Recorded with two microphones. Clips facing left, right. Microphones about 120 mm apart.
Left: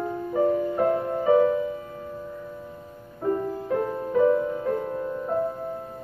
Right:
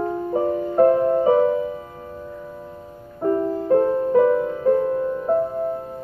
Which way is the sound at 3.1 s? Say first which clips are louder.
Right 5 dB; 40° right (ahead or behind).